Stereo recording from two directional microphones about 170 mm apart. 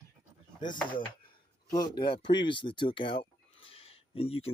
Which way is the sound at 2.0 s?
25° left (ahead or behind).